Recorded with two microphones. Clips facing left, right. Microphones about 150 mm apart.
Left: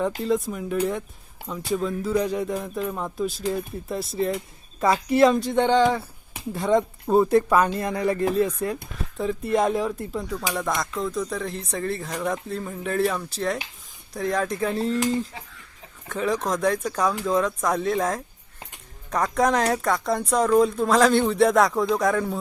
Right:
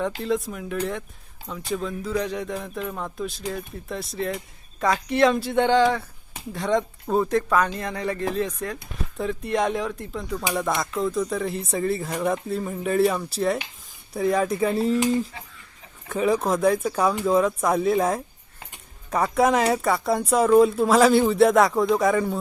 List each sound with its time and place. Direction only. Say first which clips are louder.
0.2 s speech: left 2 dB; centre (ahead or behind)